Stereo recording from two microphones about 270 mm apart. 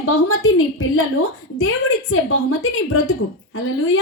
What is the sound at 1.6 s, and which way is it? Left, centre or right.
A woman's voice, left.